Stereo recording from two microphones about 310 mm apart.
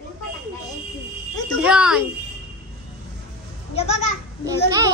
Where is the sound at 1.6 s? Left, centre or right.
Centre.